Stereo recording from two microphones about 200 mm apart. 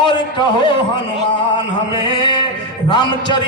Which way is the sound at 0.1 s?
20° left (ahead or behind).